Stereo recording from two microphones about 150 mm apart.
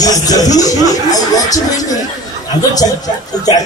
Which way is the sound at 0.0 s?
25° left (ahead or behind).